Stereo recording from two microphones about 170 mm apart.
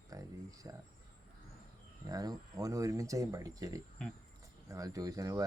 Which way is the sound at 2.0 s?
20° right (ahead or behind).